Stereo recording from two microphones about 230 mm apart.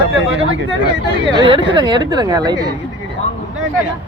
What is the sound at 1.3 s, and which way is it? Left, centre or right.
A woman's voice, centre.